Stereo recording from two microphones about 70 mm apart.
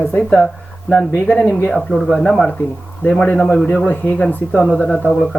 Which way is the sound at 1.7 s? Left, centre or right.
Centre.